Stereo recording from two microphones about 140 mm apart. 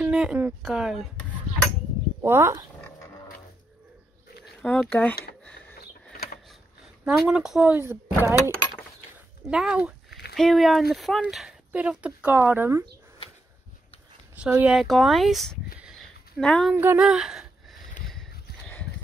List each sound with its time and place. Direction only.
0.0 s speech: 5° right (ahead or behind)
2.2 s speech: 15° right (ahead or behind)
4.6 s speech: 10° left (ahead or behind)
5.4 s a sound: 10° left (ahead or behind)
6.1 s a sound: 90° left
7.1 s speech: 5° right (ahead or behind)
7.7 s speech: 15° right (ahead or behind)
9.5 s a sound: 5° right (ahead or behind)
10.4 s speech: centre (ahead or behind); by 12.8 s 15° right (ahead or behind)
14.3 s speech: 10° right (ahead or behind); by 16.7 s 5° left (ahead or behind)
16.7 s speech: 15° right (ahead or behind)